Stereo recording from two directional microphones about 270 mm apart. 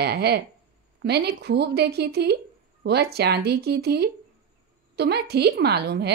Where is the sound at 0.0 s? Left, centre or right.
Right.